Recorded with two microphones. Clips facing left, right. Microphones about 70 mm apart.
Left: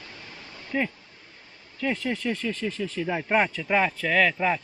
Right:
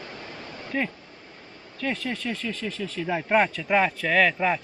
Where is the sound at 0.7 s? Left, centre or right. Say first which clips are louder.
Left 1 dB; centre.